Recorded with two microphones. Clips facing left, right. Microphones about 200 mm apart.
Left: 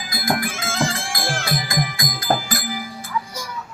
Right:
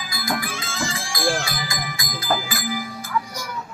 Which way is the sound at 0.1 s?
50° left (ahead or behind).